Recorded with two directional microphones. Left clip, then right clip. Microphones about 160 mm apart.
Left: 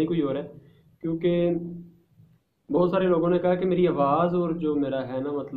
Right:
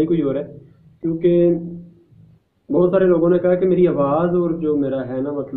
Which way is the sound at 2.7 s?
20° left (ahead or behind).